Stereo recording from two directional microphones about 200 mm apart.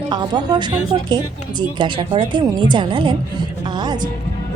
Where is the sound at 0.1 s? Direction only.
20° right (ahead or behind).